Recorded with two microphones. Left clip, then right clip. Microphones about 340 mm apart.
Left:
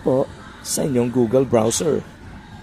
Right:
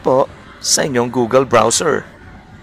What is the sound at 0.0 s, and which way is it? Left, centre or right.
Speech, right.